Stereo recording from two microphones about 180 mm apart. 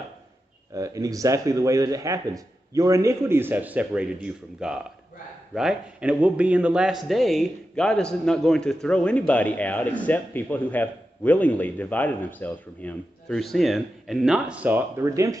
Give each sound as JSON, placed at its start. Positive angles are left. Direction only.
{"t": 0.7, "sound": "a man's voice", "side_deg": -20}